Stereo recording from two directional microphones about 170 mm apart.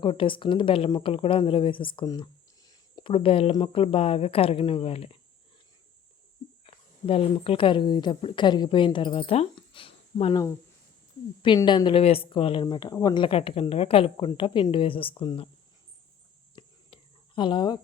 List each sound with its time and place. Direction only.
0.0 s speech: 30° left (ahead or behind)
6.7 s speech: 35° left (ahead or behind)
11.4 s speech: 25° left (ahead or behind)
13.2 s speech: 35° left (ahead or behind)
16.6 s a sound: 30° left (ahead or behind)